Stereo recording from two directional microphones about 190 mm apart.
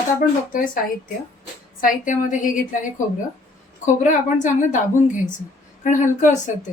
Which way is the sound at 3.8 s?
40° left (ahead or behind).